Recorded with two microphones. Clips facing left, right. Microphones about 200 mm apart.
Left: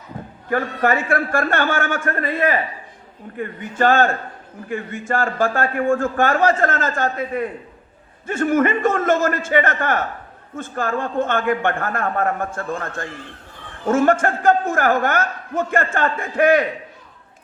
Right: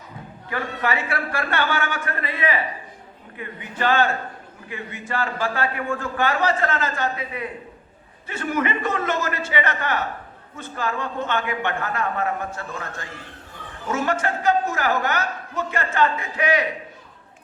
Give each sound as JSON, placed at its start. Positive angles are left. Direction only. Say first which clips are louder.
{"t": 0.5, "sound": "a man's voice", "louder": "left 6 dB", "side_deg": 45}